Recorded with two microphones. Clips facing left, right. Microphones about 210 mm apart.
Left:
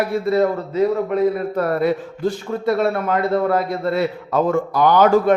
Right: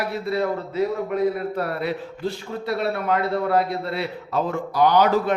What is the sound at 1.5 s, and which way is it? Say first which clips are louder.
A man's voice: left 7 dB; 45° left (ahead or behind).